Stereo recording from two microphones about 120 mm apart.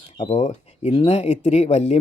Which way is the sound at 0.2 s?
70° left (ahead or behind).